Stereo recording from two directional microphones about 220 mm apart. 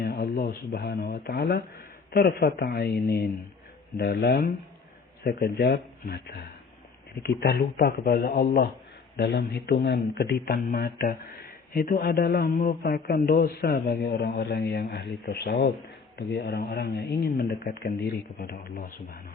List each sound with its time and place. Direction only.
0.0 s a man's voice: 50° left (ahead or behind)
3.9 s a man's voice: 45° left (ahead or behind)